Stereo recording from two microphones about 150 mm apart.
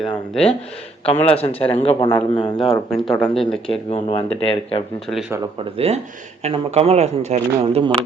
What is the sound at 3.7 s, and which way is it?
Speech, 45° left (ahead or behind).